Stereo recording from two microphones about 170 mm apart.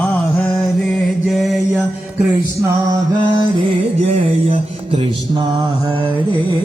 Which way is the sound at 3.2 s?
25° right (ahead or behind).